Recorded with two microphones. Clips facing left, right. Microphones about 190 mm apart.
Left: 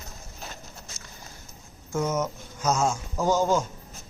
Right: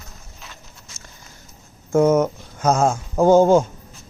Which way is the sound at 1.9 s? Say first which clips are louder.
Right 11 dB; 55° right (ahead or behind).